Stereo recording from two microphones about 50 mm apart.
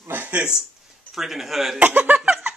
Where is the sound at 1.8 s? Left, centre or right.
Right.